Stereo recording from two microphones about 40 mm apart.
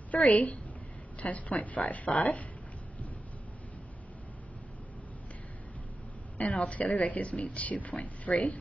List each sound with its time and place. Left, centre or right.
0.1 s a woman's voice: left
6.3 s a woman's voice: left